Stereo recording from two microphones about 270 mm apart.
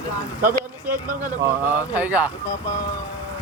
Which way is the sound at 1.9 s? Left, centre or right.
Centre.